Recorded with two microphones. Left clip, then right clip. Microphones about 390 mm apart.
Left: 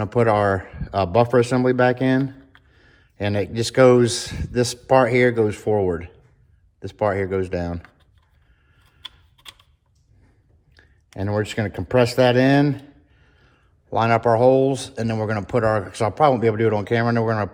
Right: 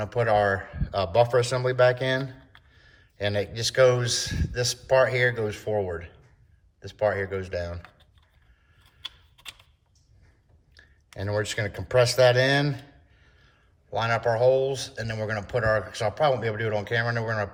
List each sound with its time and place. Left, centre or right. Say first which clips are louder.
0.1 s speech: left 4 dB; centre
9.0 s typing: even; centre
11.2 s speech: left 4 dB; centre
13.1 s a sound: left 2 dB; centre
14.0 s speech: left 6 dB; centre